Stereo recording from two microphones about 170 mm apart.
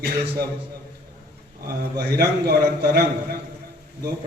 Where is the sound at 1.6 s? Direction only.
65° right (ahead or behind).